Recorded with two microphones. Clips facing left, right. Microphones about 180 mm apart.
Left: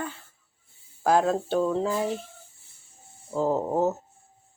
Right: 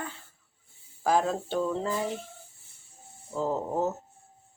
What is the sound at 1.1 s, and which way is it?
Speech, 10° left (ahead or behind).